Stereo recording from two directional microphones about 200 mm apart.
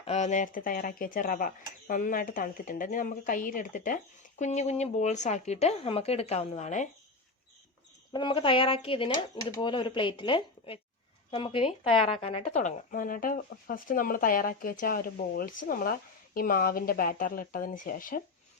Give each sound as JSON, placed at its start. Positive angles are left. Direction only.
{"t": 0.0, "sound": "speech", "side_deg": 35}
{"t": 8.1, "sound": "speech", "side_deg": 25}